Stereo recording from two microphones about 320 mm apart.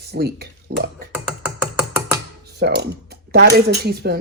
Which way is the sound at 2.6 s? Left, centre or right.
Right.